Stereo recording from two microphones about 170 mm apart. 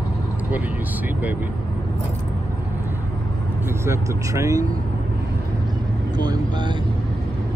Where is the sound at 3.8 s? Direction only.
15° right (ahead or behind).